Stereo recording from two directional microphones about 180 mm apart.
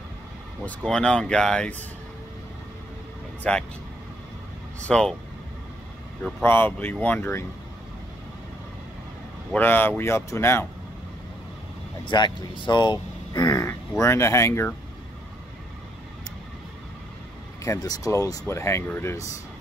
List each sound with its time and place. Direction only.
0.7 s speech: 5° left (ahead or behind)
3.4 s speech: 5° left (ahead or behind)
4.8 s speech: 5° left (ahead or behind)
6.2 s speech: 10° left (ahead or behind)
9.5 s speech: 10° left (ahead or behind)
12.0 s speech: 25° left (ahead or behind)
17.6 s speech: 20° left (ahead or behind)